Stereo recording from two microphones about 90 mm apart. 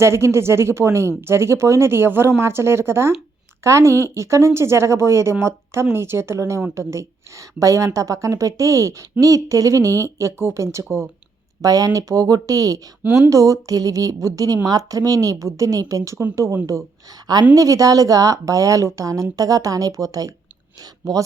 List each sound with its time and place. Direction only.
0.0 s a woman's voice: 30° right (ahead or behind)
11.6 s a woman's voice: 40° right (ahead or behind)